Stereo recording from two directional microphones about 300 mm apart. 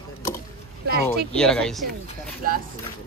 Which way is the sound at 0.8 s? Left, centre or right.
Right.